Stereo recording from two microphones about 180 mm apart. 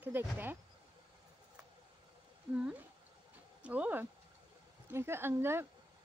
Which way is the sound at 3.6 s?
10° right (ahead or behind).